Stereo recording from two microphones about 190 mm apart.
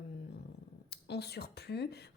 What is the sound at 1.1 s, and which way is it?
Speech, 60° left (ahead or behind).